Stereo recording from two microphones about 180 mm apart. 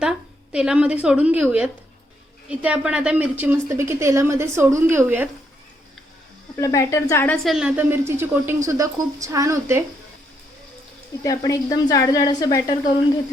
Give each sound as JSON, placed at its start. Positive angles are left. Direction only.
{"t": 0.0, "sound": "a woman's voice", "side_deg": -5}
{"t": 6.6, "sound": "a woman's voice", "side_deg": 15}
{"t": 7.4, "sound": "a woman's voice", "side_deg": -5}
{"t": 11.2, "sound": "speech", "side_deg": 20}